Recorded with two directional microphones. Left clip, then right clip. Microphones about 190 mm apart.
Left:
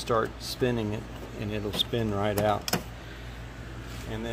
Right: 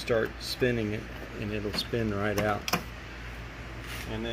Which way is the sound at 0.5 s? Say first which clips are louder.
Even; 15° left (ahead or behind).